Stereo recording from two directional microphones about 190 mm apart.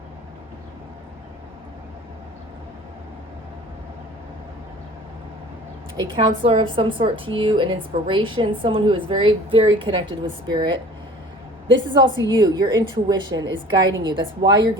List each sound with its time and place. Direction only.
6.0 s a woman's voice: 25° right (ahead or behind)
11.9 s a woman's voice: 25° right (ahead or behind)